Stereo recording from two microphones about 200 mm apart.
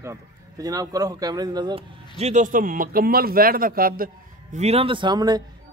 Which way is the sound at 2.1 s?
35° right (ahead or behind).